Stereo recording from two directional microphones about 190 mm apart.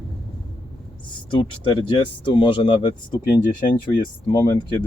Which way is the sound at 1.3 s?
25° left (ahead or behind).